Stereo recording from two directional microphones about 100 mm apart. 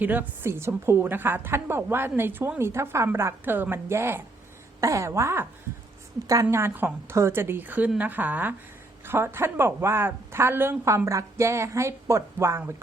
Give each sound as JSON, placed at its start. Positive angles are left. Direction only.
{"t": 0.0, "sound": "a woman's voice", "side_deg": -15}